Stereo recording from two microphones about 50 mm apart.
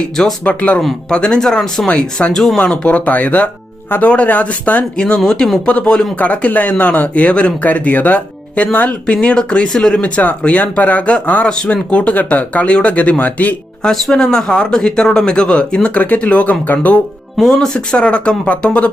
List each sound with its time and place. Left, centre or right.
0.4 s speech: left; by 1.9 s centre
1.9 s speech: left
3.8 s speech: left
4.1 s speech: left
5.1 s speech: centre
5.6 s speech: left
9.2 s speech: centre
11.4 s speech: centre
13.8 s speech: centre; by 17.0 s left
17.3 s speech: centre
17.9 s speech: left